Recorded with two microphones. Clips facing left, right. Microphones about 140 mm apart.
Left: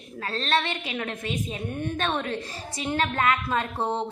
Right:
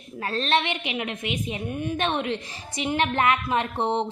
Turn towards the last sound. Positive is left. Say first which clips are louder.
# right 3 dB
turn(degrees=-20)  # may be behind; listen again after turning